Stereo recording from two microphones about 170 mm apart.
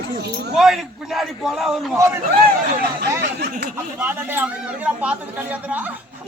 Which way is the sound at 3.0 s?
65° right (ahead or behind).